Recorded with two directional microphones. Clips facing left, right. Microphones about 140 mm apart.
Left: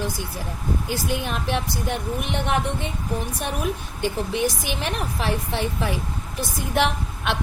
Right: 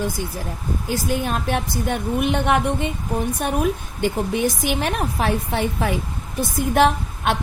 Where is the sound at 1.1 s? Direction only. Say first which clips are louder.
Right 3 dB; 45° right (ahead or behind).